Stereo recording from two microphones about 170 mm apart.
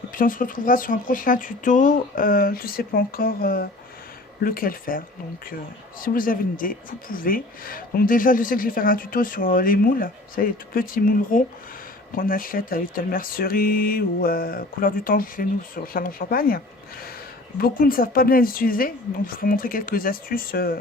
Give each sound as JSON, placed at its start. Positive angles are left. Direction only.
{"t": 0.1, "sound": "speech", "side_deg": 55}
{"t": 17.6, "sound": "speech", "side_deg": 60}